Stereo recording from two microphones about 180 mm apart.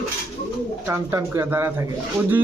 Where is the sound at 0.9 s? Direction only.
15° right (ahead or behind).